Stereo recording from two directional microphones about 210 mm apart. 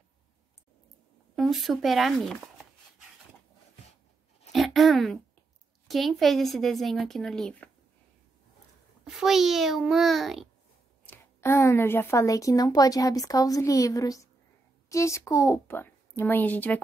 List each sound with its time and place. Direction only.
1.3 s speech: centre (ahead or behind)
4.5 s a sound: centre (ahead or behind)
5.9 s speech: centre (ahead or behind)
9.0 s speech: centre (ahead or behind)
11.1 s a woman's voice: 10° left (ahead or behind)